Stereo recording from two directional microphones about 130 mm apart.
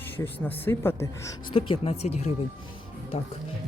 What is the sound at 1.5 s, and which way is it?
Speech, 45° left (ahead or behind).